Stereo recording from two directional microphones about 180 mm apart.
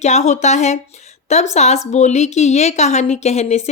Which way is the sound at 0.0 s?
40° left (ahead or behind).